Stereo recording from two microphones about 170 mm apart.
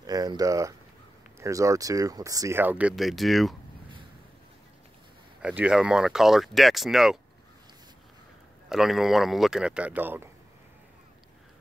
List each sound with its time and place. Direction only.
0.0 s a sound: 20° right (ahead or behind)
1.4 s speech: 20° right (ahead or behind)
3.0 s speech: centre (ahead or behind)
5.4 s speech: 10° right (ahead or behind)
8.6 s speech: centre (ahead or behind)